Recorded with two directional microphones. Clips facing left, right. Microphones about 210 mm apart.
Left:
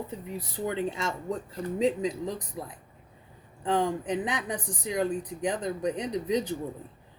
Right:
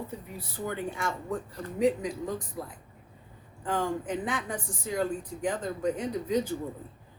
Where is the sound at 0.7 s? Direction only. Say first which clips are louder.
Left 2 dB; 25° left (ahead or behind).